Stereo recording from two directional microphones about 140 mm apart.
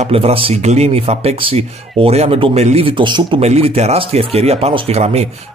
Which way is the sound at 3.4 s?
50° right (ahead or behind).